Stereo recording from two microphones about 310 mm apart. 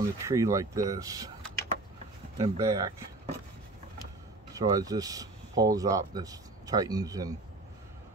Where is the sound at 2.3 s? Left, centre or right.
Centre.